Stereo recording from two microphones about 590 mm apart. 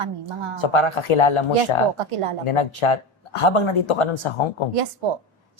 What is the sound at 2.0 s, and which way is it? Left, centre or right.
Speech, right.